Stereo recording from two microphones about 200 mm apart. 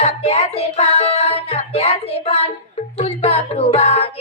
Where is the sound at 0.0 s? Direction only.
30° left (ahead or behind).